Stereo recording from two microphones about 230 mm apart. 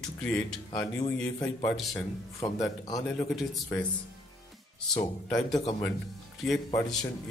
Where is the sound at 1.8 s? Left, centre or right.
Centre.